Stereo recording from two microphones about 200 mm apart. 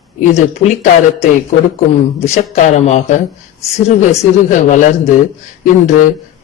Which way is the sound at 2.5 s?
35° left (ahead or behind).